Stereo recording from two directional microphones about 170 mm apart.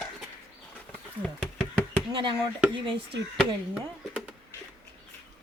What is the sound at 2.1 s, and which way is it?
Speech, 30° right (ahead or behind).